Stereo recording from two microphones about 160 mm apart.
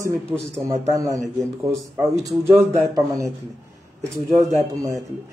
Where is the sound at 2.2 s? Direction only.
20° right (ahead or behind).